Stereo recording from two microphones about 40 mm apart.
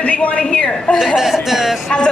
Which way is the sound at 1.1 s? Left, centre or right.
Centre.